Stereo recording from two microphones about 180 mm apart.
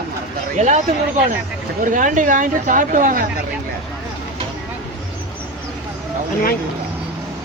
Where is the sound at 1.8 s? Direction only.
45° right (ahead or behind).